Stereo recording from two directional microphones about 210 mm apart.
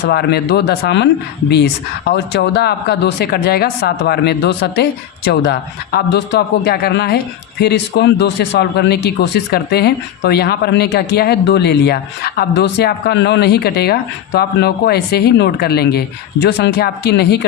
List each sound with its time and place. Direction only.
0.1 s speech: 50° left (ahead or behind)
2.0 s speech: 50° left (ahead or behind)